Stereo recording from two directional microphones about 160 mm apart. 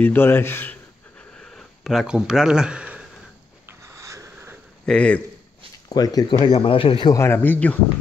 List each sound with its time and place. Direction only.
0.0 s a man's voice: 15° left (ahead or behind)
1.4 s a sound: 5° left (ahead or behind)
3.9 s a sound: 20° right (ahead or behind)
4.8 s a man's voice: 5° left (ahead or behind)
5.9 s speech: 25° left (ahead or behind)
7.2 s a man's voice: 15° left (ahead or behind)